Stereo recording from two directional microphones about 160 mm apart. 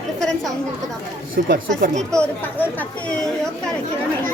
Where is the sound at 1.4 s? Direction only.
90° right.